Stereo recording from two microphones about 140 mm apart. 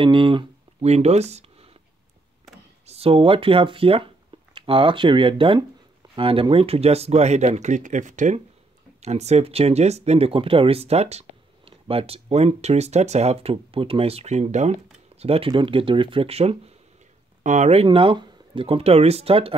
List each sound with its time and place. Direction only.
0.0 s speech: 40° right (ahead or behind)
2.9 s speech: 45° right (ahead or behind); by 8.4 s 60° right (ahead or behind)
9.0 s speech: 50° right (ahead or behind)
17.4 s speech: 60° right (ahead or behind)
17.8 s speech: 40° right (ahead or behind)